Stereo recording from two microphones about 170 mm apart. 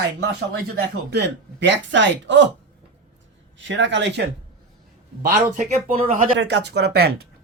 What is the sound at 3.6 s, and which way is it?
Speech, 90° right.